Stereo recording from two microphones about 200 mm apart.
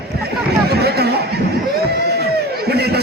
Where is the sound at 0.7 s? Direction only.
55° right (ahead or behind).